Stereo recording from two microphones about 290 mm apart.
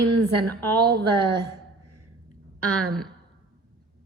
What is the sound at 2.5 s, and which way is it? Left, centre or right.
Speech, right.